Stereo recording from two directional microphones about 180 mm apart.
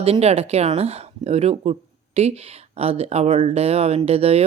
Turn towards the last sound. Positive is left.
turn(degrees=-35)  # may be behind; listen again after turning